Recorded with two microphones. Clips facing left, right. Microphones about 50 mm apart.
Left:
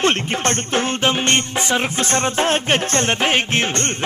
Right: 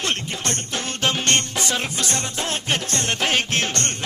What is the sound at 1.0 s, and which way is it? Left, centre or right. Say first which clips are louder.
Music: even; left.